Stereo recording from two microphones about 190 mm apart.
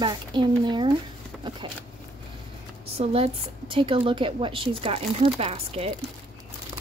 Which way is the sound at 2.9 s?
30° right (ahead or behind).